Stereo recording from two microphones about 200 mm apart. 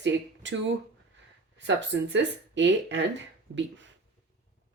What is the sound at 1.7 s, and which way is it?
Speech, 65° right (ahead or behind).